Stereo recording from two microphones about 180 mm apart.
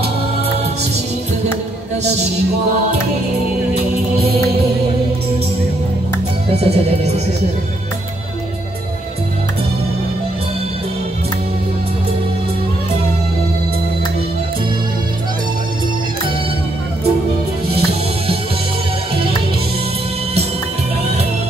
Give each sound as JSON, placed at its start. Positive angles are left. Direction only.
{"t": 6.5, "sound": "music", "side_deg": -35}
{"t": 17.7, "sound": "music", "side_deg": -30}